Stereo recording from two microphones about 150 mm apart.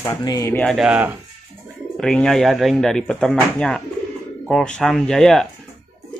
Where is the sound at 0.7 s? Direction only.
10° right (ahead or behind).